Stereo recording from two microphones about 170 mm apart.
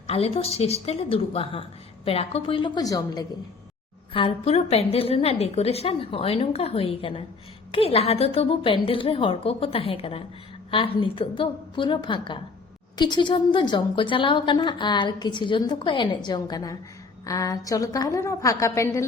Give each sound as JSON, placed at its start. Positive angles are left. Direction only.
{"t": 0.1, "sound": "a woman's voice", "side_deg": 35}
{"t": 4.1, "sound": "a woman's voice", "side_deg": 35}